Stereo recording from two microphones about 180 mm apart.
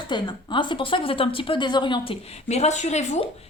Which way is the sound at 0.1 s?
25° left (ahead or behind).